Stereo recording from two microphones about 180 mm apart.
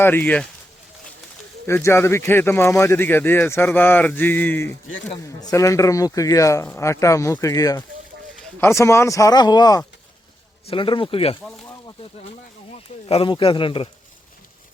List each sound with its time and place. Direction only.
0.0 s speech: 10° left (ahead or behind)
1.6 s a man's voice: 15° left (ahead or behind); by 11.3 s 30° left (ahead or behind)
13.1 s a man's voice: 30° left (ahead or behind)